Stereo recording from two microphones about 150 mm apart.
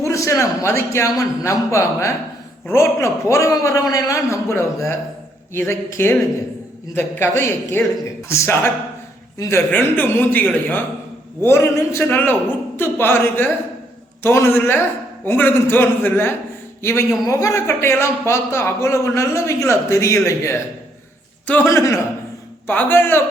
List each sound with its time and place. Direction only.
0.0 s a man's voice: 20° left (ahead or behind)